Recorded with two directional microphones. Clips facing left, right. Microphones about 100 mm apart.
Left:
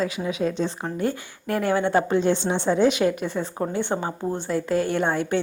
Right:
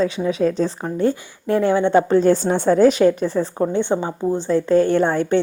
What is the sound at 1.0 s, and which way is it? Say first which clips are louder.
Speech: right 8 dB; 25° right (ahead or behind).